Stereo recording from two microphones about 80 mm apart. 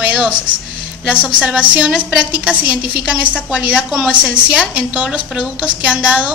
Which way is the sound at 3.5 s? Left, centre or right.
Centre.